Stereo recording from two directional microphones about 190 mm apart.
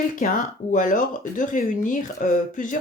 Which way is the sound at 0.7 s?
45° left (ahead or behind).